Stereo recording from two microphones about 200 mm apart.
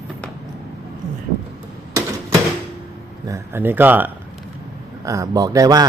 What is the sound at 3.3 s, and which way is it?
A man's voice, 10° right (ahead or behind).